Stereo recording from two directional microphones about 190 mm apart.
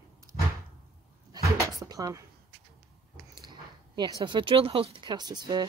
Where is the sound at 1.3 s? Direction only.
20° right (ahead or behind).